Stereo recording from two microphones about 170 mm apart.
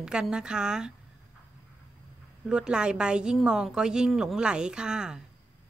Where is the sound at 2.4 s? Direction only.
5° right (ahead or behind).